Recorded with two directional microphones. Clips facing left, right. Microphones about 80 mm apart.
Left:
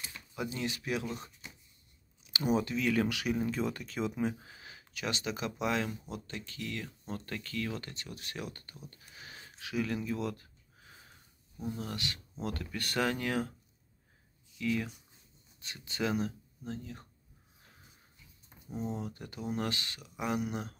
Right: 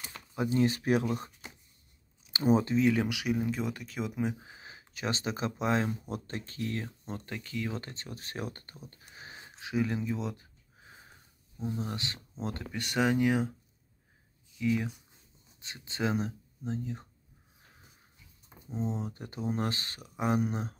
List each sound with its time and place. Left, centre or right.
0.3 s speech: right
2.3 s speech: right
2.9 s speech: centre; by 6.9 s right
7.1 s speech: centre
7.7 s speech: right
11.6 s speech: right
12.7 s speech: centre
14.6 s speech: centre
15.6 s speech: right
18.8 s speech: right